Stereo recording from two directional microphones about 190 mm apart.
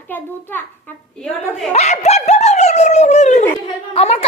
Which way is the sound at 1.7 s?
35° left (ahead or behind).